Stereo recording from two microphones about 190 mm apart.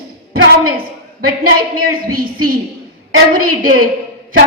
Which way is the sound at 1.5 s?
50° right (ahead or behind).